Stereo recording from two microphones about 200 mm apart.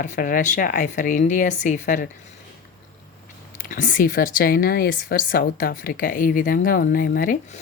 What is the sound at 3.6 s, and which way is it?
Speech, 40° left (ahead or behind).